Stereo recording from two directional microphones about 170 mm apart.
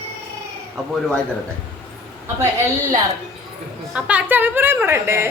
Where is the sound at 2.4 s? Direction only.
15° right (ahead or behind).